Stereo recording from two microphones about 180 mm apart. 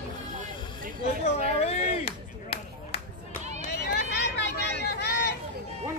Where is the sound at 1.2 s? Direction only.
35° left (ahead or behind).